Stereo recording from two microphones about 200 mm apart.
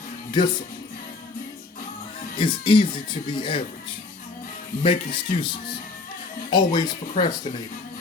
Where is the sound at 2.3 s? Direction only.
25° left (ahead or behind).